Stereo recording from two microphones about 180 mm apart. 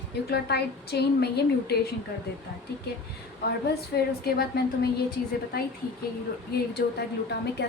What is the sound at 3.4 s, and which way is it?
A woman's voice, 65° left (ahead or behind).